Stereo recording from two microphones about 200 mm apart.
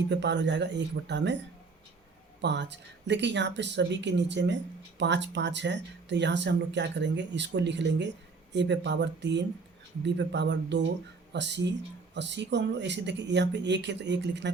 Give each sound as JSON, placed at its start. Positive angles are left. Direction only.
{"t": 0.1, "sound": "speech", "side_deg": -60}
{"t": 2.4, "sound": "speech", "side_deg": -60}